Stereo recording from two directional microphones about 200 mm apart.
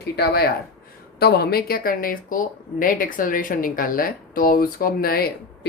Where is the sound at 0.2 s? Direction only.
50° left (ahead or behind).